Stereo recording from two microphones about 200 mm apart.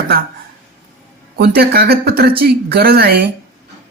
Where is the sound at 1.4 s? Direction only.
50° right (ahead or behind).